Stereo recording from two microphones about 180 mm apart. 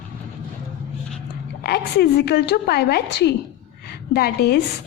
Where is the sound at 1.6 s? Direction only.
65° left (ahead or behind).